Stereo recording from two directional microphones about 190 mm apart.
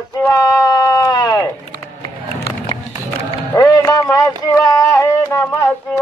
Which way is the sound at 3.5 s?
15° left (ahead or behind).